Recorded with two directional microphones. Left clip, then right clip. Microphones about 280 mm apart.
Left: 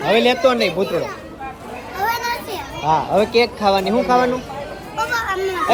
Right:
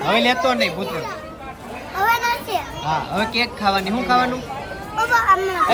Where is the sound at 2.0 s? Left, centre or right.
Centre.